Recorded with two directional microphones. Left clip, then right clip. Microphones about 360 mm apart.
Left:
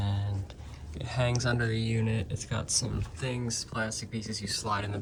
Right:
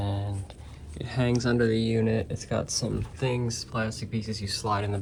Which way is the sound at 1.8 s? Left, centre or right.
Centre.